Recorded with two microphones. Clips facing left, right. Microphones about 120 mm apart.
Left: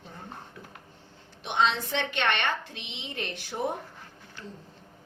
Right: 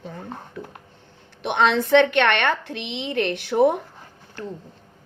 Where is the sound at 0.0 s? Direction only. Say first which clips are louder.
Right 8 dB; 90° right.